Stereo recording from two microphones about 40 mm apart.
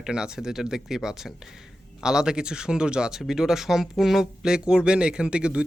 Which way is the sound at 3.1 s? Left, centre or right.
Centre.